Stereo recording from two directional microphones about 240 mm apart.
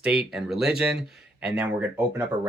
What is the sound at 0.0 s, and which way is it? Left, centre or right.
Speech, centre.